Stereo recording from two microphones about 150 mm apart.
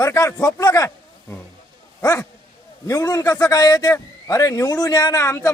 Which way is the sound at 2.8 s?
25° left (ahead or behind).